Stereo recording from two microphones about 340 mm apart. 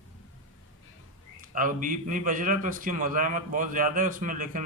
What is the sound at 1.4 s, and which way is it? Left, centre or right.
A man's voice, right.